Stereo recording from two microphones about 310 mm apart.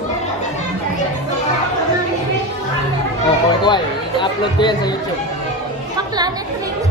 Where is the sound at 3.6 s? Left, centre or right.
Centre.